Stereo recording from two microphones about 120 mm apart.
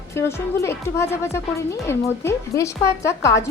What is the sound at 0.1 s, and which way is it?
A woman's voice, 20° left (ahead or behind).